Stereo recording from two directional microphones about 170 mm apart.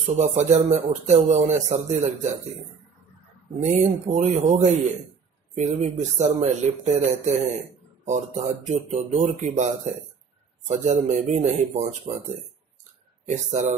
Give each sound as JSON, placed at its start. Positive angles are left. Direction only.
{"t": 0.0, "sound": "speech", "side_deg": -45}
{"t": 3.7, "sound": "speech", "side_deg": -45}
{"t": 5.6, "sound": "speech", "side_deg": -40}